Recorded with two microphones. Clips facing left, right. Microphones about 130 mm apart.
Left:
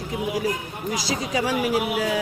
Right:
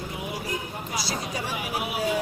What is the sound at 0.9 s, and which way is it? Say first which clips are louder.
Speech: left 6 dB; 90° left.